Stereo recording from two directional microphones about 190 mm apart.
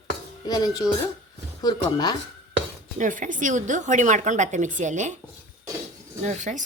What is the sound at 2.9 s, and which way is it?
A woman's voice, 40° right (ahead or behind).